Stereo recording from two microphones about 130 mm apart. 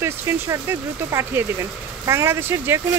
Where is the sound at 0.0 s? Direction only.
20° right (ahead or behind).